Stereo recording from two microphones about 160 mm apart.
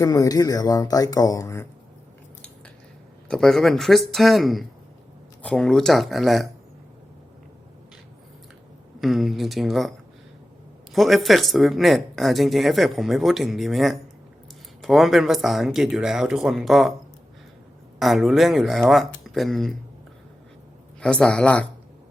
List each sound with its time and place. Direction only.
0.0 s speech: 20° left (ahead or behind)
3.2 s speech: 5° left (ahead or behind)
9.0 s speech: centre (ahead or behind)
10.9 s speech: centre (ahead or behind)
18.0 s speech: centre (ahead or behind)
21.0 s speech: 5° left (ahead or behind)